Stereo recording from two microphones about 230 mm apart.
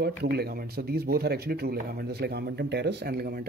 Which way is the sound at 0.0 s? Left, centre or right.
Right.